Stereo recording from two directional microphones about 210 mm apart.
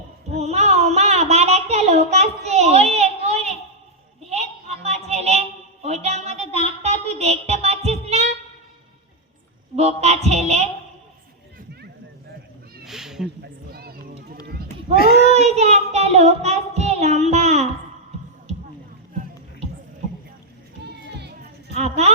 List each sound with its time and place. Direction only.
0.3 s a sound: 30° right (ahead or behind)
6.8 s music: 30° right (ahead or behind)
9.7 s music: 30° right (ahead or behind)
12.8 s a sound: centre (ahead or behind)
13.2 s a sound: 45° right (ahead or behind)
14.9 s a child's voice: 45° left (ahead or behind)
15.3 s child singing: 30° right (ahead or behind)
21.2 s music: 50° right (ahead or behind)
21.8 s music: 30° right (ahead or behind)